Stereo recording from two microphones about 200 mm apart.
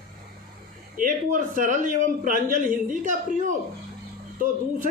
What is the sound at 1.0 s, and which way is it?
A man's voice, 40° right (ahead or behind).